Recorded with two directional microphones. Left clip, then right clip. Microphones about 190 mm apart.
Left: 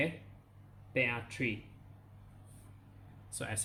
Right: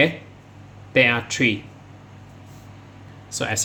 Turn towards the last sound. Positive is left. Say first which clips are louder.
# right 16 dB
turn(degrees=-5)  # may be behind; listen again after turning